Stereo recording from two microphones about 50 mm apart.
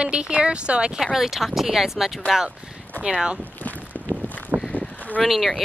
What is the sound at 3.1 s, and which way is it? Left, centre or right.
Speech, centre.